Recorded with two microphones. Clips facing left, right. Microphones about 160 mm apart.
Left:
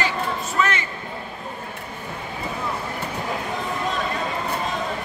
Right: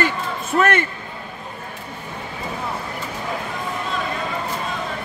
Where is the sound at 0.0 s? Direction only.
55° right (ahead or behind).